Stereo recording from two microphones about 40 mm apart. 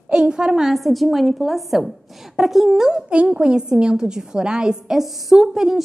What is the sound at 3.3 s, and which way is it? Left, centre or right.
A woman's voice, right.